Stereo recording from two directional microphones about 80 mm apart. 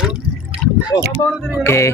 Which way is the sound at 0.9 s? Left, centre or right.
Left.